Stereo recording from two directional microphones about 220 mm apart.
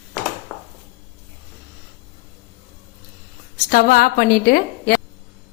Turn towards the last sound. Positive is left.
turn(degrees=40)  # may be behind; listen again after turning